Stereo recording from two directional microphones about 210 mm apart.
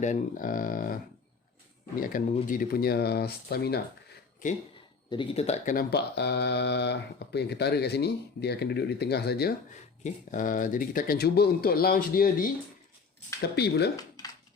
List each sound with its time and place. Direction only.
0.0 s speech: 35° left (ahead or behind)
2.1 s speech: 40° left (ahead or behind)
5.1 s speech: 25° left (ahead or behind); by 9.5 s 50° left (ahead or behind)
10.0 s speech: 40° left (ahead or behind)